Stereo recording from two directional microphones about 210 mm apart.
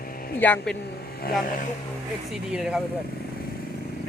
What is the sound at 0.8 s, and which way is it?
Speech, 45° left (ahead or behind).